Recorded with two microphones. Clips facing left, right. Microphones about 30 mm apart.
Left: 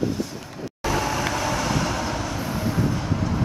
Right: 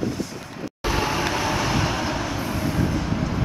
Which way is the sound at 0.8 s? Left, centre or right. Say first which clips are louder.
Even; right.